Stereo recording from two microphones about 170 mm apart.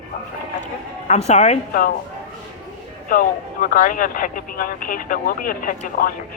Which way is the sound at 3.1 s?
55° left (ahead or behind).